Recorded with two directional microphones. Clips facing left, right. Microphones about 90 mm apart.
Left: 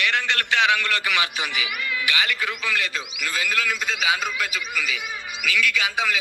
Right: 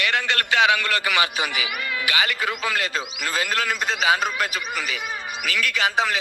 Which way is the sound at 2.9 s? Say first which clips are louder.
Right 3 dB; 40° right (ahead or behind).